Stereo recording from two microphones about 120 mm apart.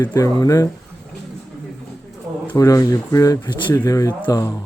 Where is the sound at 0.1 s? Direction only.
25° left (ahead or behind).